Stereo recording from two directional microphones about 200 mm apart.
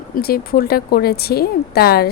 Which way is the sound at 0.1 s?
50° left (ahead or behind).